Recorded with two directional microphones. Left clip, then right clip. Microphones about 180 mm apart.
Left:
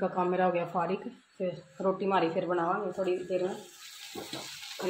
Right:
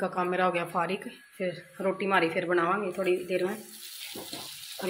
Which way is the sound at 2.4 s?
15° right (ahead or behind).